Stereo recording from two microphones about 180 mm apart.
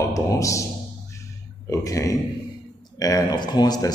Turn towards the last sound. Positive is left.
turn(degrees=20)  # may be behind; listen again after turning